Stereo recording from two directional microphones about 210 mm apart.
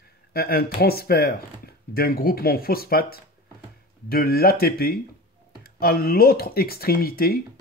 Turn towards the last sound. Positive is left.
turn(degrees=45)  # may be behind; listen again after turning